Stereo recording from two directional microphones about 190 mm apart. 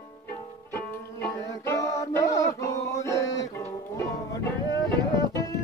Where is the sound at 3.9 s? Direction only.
15° left (ahead or behind).